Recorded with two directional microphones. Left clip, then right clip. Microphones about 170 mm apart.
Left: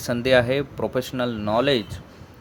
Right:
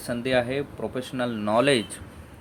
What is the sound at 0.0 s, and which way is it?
Speech, 30° left (ahead or behind).